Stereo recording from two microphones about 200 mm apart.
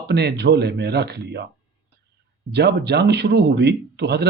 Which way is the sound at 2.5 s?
55° right (ahead or behind).